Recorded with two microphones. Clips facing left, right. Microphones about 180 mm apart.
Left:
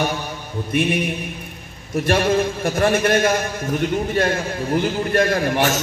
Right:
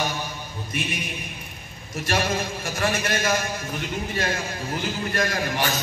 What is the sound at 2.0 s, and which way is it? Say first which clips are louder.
A man's voice: left 7 dB; 55° left (ahead or behind).